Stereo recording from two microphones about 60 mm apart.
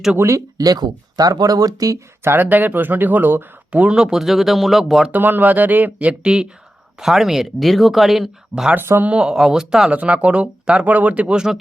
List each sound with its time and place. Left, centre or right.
0.2 s speech: right
0.5 s speech: right
2.2 s speech: right
3.7 s speech: centre
5.1 s speech: right; by 9.9 s centre
9.9 s speech: right